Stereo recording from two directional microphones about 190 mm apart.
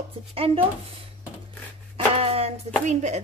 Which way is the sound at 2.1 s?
30° right (ahead or behind).